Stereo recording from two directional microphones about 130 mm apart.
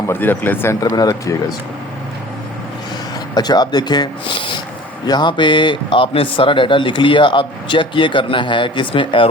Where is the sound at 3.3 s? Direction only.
30° left (ahead or behind).